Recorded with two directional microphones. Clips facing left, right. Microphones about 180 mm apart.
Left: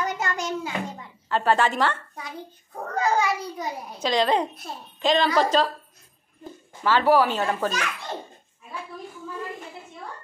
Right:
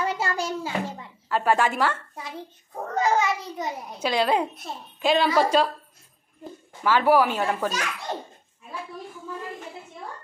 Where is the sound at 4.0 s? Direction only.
10° right (ahead or behind).